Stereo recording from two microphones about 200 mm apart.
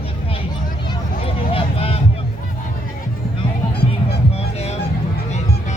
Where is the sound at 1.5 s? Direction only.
30° left (ahead or behind).